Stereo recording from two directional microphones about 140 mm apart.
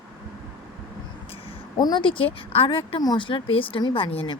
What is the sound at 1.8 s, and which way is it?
Speech, 30° left (ahead or behind).